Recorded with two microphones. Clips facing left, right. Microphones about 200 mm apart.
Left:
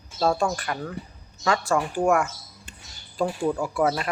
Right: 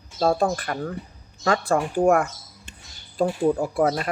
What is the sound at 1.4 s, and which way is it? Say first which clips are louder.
Speech: right 2 dB; 55° right (ahead or behind).